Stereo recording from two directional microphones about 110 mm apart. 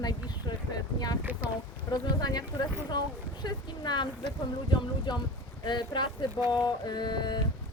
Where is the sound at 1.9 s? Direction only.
35° left (ahead or behind).